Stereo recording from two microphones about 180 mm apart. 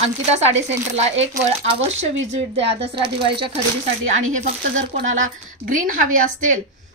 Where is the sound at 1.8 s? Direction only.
40° right (ahead or behind).